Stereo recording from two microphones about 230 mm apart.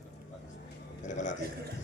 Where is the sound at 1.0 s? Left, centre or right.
Left.